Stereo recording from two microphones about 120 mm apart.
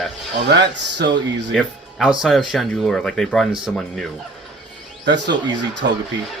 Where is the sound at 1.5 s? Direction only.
Centre (ahead or behind).